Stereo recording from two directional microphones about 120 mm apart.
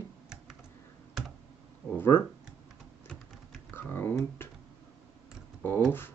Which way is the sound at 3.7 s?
15° left (ahead or behind).